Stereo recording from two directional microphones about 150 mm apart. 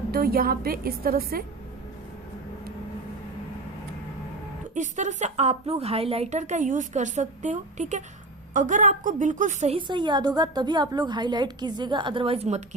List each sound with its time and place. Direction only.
0.1 s a woman's voice: 90° right
4.7 s a woman's voice: 55° right (ahead or behind)
9.7 s a woman's voice: 30° right (ahead or behind)